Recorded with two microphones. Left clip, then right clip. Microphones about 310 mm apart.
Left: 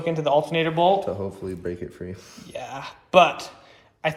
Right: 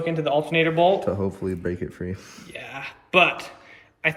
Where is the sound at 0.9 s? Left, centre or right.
Right.